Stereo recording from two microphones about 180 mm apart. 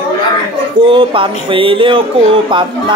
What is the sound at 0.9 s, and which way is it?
Speech, 25° right (ahead or behind).